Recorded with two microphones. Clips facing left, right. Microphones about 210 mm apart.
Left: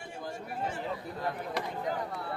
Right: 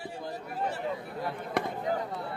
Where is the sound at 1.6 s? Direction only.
55° right (ahead or behind).